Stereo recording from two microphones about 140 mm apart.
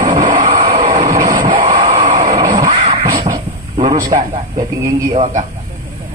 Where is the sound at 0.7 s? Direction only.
70° right (ahead or behind).